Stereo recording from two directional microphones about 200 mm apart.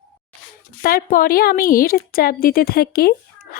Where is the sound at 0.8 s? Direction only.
45° left (ahead or behind).